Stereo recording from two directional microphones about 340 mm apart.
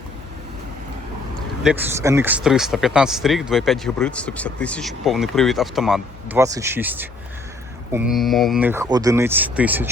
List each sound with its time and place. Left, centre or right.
1.6 s speech: centre